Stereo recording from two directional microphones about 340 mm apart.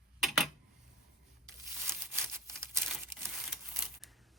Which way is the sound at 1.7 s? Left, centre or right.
Centre.